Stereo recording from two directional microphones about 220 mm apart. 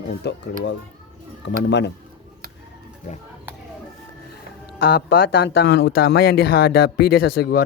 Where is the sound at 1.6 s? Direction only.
50° left (ahead or behind).